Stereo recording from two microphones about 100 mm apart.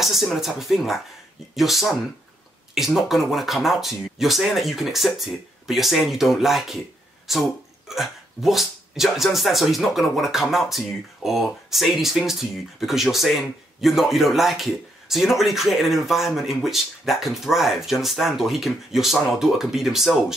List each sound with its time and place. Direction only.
0.0 s speech: centre (ahead or behind)